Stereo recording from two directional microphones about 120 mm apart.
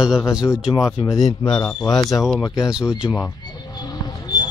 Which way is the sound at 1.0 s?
55° left (ahead or behind).